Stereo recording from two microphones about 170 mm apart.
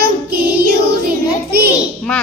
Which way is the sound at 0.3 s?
60° right (ahead or behind).